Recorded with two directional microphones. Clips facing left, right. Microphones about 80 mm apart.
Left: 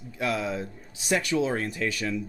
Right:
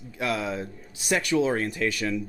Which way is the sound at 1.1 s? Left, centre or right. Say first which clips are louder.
Right 2 dB; right.